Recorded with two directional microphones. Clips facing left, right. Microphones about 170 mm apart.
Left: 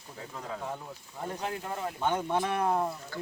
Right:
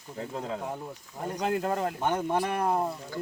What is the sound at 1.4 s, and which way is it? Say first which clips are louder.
Speech: right 9 dB; 65° right (ahead or behind).